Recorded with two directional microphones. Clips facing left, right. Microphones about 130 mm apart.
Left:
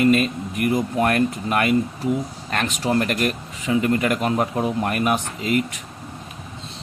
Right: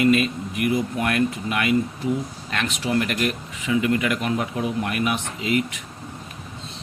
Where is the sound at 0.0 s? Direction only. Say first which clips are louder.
Left 1 dB; 40° left (ahead or behind).